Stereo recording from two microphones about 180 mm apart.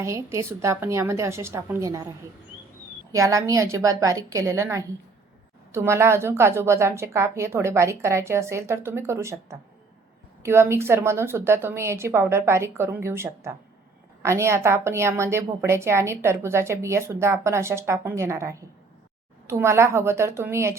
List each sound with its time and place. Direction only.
0.0 s a woman's voice: 15° right (ahead or behind)